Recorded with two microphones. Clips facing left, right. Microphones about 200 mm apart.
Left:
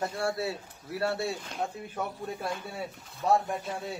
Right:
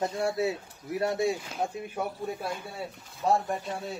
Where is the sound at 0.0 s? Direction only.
20° right (ahead or behind).